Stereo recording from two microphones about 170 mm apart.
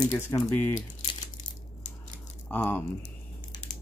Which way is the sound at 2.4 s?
10° left (ahead or behind).